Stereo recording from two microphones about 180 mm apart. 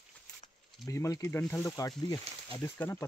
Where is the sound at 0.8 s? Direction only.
15° left (ahead or behind).